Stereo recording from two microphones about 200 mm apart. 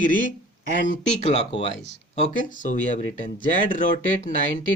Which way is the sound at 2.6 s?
40° left (ahead or behind).